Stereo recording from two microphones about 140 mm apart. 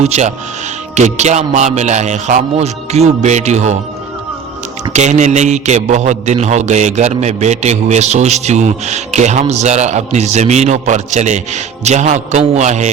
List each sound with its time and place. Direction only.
0.0 s a man's voice: 55° right (ahead or behind)
4.9 s a man's voice: 55° right (ahead or behind)